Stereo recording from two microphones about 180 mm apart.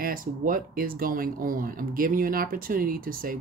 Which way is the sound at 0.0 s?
50° right (ahead or behind).